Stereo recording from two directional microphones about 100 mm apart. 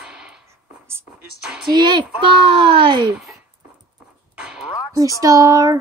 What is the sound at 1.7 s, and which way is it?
Speech, 45° right (ahead or behind).